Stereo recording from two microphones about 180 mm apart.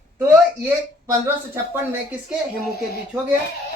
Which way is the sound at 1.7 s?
10° right (ahead or behind).